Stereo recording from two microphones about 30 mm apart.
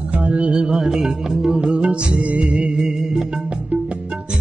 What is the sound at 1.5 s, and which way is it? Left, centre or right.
Music, right.